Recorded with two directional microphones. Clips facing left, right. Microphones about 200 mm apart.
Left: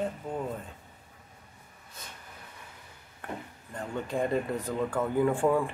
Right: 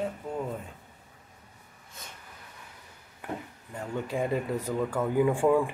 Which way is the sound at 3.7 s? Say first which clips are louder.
Even; 10° right (ahead or behind).